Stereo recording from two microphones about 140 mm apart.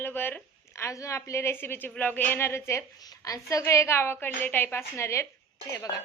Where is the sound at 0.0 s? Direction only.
15° left (ahead or behind).